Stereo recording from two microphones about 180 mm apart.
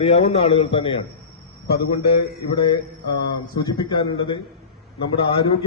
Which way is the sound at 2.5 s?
25° left (ahead or behind).